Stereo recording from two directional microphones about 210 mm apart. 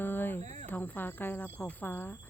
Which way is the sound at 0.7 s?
10° left (ahead or behind).